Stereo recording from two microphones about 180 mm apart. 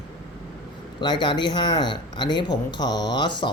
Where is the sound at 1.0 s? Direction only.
25° left (ahead or behind).